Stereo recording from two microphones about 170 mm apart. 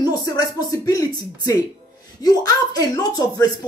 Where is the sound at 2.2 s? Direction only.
20° left (ahead or behind).